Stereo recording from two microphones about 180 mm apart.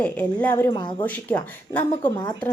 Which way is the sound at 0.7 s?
25° left (ahead or behind).